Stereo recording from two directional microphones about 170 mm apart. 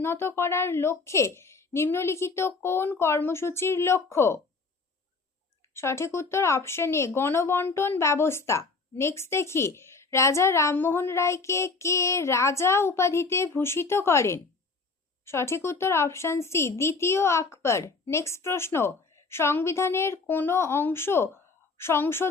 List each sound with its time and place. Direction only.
0.0 s speech: 15° left (ahead or behind)
5.7 s speech: 15° left (ahead or behind)